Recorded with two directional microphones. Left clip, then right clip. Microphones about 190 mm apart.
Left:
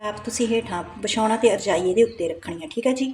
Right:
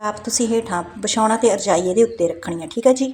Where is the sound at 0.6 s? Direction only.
15° right (ahead or behind).